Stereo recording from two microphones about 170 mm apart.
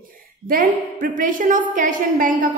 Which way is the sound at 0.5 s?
55° right (ahead or behind).